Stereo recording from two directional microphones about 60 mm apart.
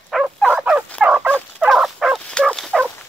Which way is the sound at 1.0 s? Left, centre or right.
Right.